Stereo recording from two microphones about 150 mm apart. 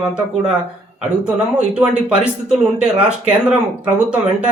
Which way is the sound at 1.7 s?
5° right (ahead or behind).